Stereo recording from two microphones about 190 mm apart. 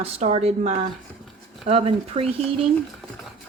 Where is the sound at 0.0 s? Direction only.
35° right (ahead or behind).